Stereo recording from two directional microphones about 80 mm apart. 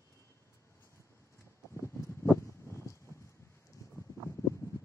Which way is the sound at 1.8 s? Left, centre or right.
Left.